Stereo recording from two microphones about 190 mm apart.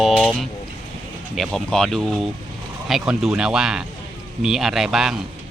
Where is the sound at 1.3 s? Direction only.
Centre (ahead or behind).